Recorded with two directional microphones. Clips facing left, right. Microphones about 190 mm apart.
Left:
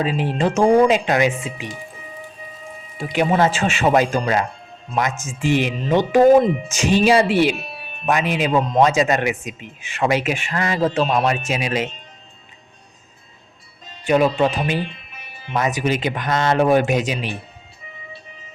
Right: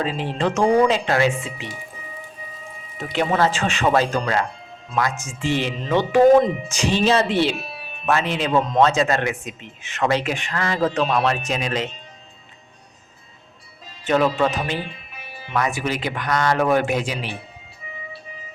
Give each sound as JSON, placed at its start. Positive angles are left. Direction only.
{"t": 0.0, "sound": "speech", "side_deg": 15}
{"t": 3.0, "sound": "speech", "side_deg": 10}
{"t": 7.6, "sound": "music", "side_deg": 0}
{"t": 8.0, "sound": "speech", "side_deg": 15}
{"t": 14.0, "sound": "speech", "side_deg": 10}